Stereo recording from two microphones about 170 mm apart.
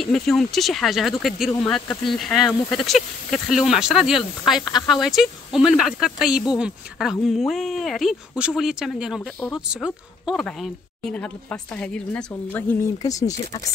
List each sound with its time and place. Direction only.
0.0 s speech: centre (ahead or behind); by 13.2 s 20° left (ahead or behind)